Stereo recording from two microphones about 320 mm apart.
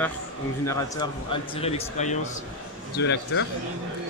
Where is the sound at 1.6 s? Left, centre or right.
Left.